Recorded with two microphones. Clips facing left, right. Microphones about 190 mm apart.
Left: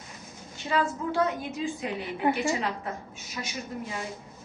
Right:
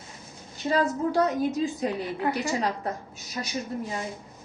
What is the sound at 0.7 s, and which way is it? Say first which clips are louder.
A woman's voice: right 3 dB; 40° right (ahead or behind).